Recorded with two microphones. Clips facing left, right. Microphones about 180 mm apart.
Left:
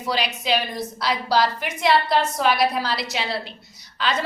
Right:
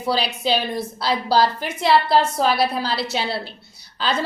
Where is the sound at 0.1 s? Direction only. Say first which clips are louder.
Right 2 dB; 30° right (ahead or behind).